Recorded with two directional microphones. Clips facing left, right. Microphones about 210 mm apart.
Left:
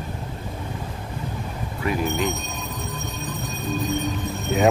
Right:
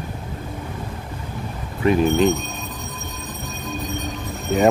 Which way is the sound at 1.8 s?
25° right (ahead or behind).